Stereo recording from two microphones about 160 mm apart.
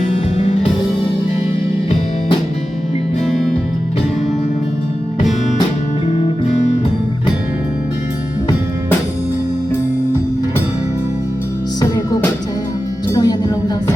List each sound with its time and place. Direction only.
3.2 s music: 5° left (ahead or behind)
11.8 s music: 20° left (ahead or behind)